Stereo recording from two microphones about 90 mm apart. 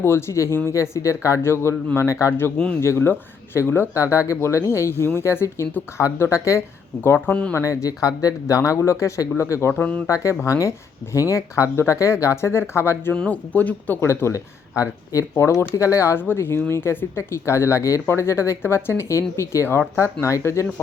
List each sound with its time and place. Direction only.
0.0 s speech: 30° left (ahead or behind)
13.1 s speech: 15° left (ahead or behind)